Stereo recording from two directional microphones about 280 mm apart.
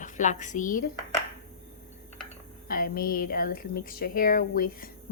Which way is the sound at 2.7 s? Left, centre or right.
Left.